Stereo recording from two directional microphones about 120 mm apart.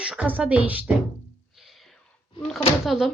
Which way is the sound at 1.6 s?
Centre (ahead or behind).